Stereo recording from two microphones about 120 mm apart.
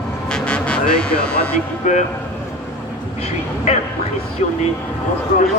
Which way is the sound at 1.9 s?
90° left.